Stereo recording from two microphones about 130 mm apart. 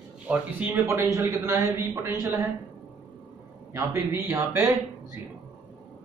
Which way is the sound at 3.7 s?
20° right (ahead or behind).